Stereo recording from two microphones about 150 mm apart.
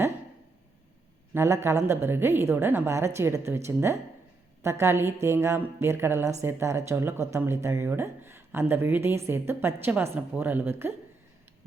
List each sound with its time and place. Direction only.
1.3 s speech: 20° right (ahead or behind)